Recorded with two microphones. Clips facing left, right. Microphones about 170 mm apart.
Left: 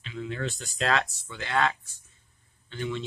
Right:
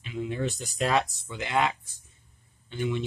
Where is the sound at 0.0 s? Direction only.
15° right (ahead or behind).